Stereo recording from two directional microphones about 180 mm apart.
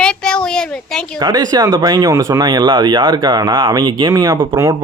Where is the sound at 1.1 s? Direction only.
20° right (ahead or behind).